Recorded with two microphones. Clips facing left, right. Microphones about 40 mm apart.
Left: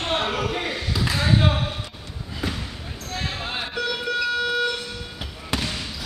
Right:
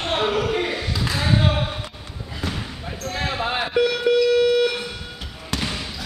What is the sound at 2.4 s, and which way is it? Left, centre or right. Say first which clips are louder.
Basketball bounce: even; centre.